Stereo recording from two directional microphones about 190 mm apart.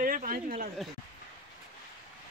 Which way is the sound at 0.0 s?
45° right (ahead or behind).